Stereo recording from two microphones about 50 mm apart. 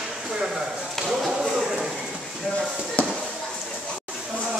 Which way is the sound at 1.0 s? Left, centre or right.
Centre.